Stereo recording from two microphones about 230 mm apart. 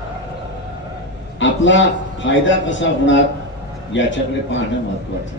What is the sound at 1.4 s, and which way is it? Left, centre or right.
A man's voice, left.